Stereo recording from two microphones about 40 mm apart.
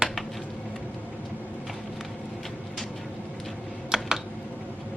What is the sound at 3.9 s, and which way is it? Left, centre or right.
Typing, centre.